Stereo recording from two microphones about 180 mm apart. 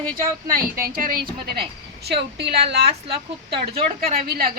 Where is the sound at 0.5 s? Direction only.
55° right (ahead or behind).